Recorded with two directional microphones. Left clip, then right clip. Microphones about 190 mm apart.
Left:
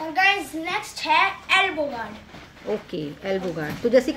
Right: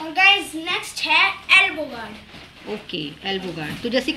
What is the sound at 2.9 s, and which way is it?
A woman's voice, 65° left (ahead or behind).